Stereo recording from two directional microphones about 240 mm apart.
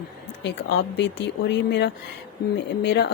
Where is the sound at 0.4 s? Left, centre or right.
Left.